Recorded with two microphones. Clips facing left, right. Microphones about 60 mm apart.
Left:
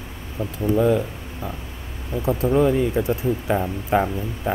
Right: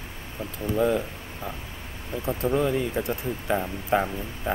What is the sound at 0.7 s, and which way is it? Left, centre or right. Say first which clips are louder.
Speech: left 4 dB; centre.